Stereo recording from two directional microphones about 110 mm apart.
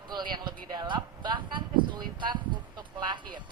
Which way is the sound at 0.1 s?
45° right (ahead or behind).